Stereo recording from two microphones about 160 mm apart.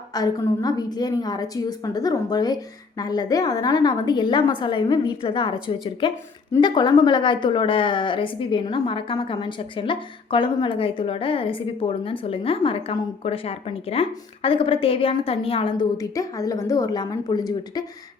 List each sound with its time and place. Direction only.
0.1 s a woman's voice: 25° left (ahead or behind)
6.6 s a woman's voice: 25° left (ahead or behind)